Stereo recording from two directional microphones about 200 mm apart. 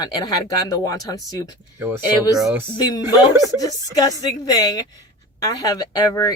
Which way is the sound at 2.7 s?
20° left (ahead or behind).